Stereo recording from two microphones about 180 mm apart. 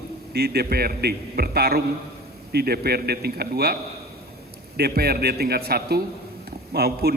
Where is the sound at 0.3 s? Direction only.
60° right (ahead or behind).